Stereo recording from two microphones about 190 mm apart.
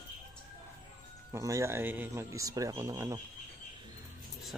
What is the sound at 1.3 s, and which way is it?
A man's voice, 15° right (ahead or behind).